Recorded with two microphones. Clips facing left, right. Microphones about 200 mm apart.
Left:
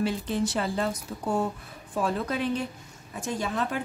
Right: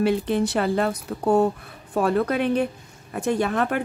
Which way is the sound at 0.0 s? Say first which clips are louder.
Right 6 dB; 65° right (ahead or behind).